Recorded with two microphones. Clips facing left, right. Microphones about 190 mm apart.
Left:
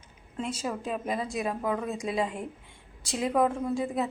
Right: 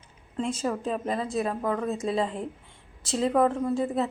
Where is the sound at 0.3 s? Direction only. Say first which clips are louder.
Right 4 dB; 5° left (ahead or behind).